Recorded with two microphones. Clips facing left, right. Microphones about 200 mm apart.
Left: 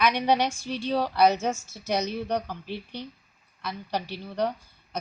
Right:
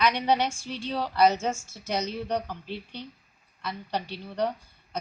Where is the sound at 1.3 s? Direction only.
10° right (ahead or behind).